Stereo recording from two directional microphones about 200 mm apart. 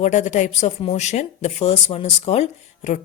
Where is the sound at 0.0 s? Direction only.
35° left (ahead or behind).